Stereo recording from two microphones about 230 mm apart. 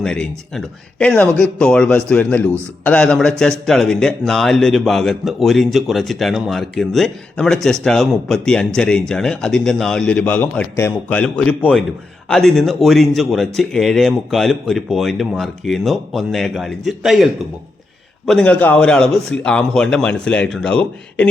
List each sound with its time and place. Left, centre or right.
0.0 s a man's voice: centre
18.3 s a man's voice: centre